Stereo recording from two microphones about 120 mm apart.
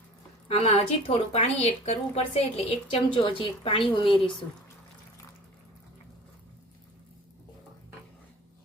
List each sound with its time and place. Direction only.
0.4 s a woman's voice: 60° left (ahead or behind)